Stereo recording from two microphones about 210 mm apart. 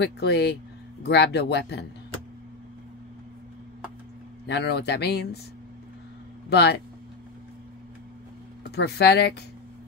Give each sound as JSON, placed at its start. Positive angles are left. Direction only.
{"t": 0.0, "sound": "speech", "side_deg": 50}
{"t": 4.5, "sound": "speech", "side_deg": 55}
{"t": 6.5, "sound": "speech", "side_deg": 50}
{"t": 8.7, "sound": "speech", "side_deg": 50}